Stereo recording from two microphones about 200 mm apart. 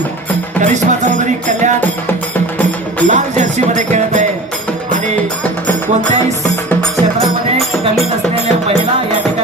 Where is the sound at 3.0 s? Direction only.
35° right (ahead or behind).